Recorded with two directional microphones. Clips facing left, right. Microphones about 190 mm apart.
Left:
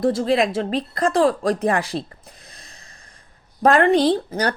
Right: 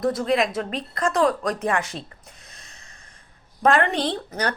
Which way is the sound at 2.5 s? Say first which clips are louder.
Left 3 dB; 35° left (ahead or behind).